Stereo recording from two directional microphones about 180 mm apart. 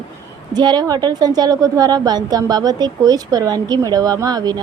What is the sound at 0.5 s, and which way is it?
A woman's voice, 25° right (ahead or behind).